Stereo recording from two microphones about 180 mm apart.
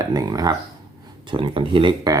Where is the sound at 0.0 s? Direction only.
20° right (ahead or behind).